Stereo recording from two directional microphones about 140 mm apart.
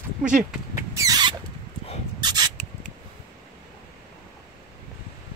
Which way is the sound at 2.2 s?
30° right (ahead or behind).